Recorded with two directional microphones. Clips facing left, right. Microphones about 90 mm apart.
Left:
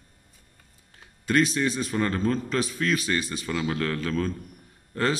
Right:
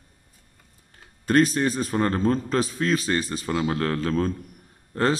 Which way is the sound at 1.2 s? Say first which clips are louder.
Right 3 dB; 40° right (ahead or behind).